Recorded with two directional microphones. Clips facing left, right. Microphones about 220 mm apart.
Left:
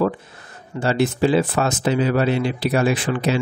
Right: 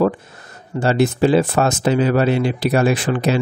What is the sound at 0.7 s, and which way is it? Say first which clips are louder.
Speech: right 3 dB; 45° right (ahead or behind).